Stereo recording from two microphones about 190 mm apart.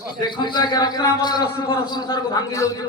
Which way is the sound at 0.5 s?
20° left (ahead or behind).